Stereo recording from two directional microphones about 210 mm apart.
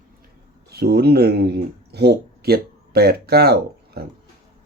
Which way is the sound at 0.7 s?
50° right (ahead or behind).